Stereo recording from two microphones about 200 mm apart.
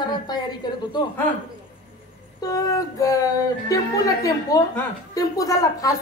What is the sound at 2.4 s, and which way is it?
Speech, 15° left (ahead or behind).